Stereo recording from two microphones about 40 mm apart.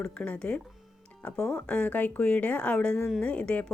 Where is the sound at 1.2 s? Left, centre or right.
Left.